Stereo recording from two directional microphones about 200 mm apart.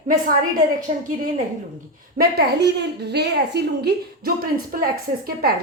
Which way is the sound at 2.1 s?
55° right (ahead or behind).